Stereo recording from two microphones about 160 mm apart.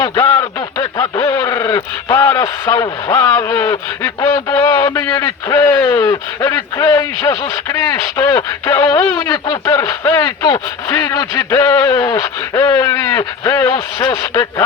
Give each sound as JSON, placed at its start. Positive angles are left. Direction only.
{"t": 0.0, "sound": "speech", "side_deg": 25}